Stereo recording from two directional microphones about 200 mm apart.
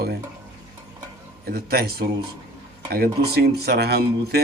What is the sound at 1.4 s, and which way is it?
Speech, 50° right (ahead or behind).